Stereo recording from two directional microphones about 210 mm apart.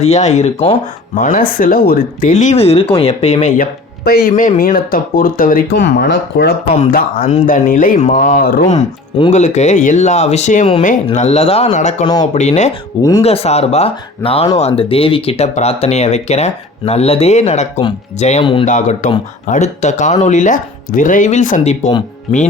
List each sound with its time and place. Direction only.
0.0 s speech: 30° left (ahead or behind)
3.6 s speech: 50° left (ahead or behind)
6.7 s speech: 40° left (ahead or behind)
8.7 s speech: 30° left (ahead or behind)
13.0 s speech: 15° left (ahead or behind)
13.2 s speech: 30° left (ahead or behind)